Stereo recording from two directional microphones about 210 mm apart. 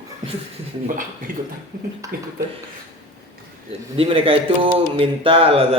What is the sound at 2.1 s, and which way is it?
Speech, 45° right (ahead or behind).